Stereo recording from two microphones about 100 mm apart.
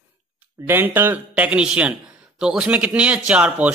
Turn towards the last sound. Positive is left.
turn(degrees=-10)  # may be behind; listen again after turning